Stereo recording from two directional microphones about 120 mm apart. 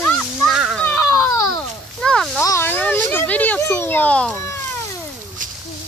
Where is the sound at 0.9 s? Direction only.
25° left (ahead or behind).